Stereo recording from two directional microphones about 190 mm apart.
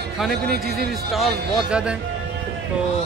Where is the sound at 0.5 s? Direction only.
55° right (ahead or behind).